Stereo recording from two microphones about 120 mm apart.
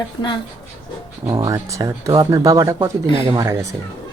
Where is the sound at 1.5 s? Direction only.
25° right (ahead or behind).